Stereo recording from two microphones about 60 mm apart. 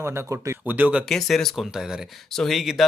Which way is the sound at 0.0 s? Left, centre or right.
Right.